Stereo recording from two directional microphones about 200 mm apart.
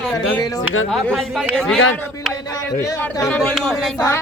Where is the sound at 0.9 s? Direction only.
Centre (ahead or behind).